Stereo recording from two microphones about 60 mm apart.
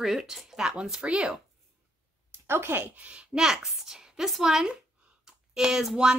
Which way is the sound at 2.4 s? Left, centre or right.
Right.